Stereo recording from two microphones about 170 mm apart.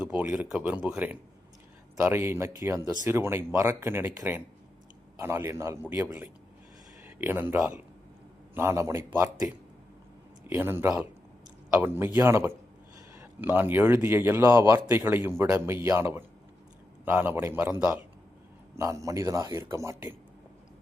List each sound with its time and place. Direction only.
0.0 s a man's voice: 10° right (ahead or behind)